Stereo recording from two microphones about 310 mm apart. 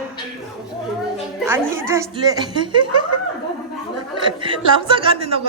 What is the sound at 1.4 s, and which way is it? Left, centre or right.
A man's voice, centre.